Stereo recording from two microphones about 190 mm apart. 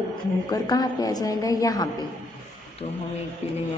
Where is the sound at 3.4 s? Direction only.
35° left (ahead or behind).